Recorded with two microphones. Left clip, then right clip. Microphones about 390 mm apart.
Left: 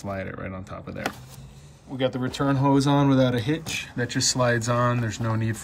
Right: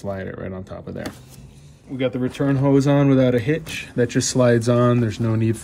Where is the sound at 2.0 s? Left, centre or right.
Centre.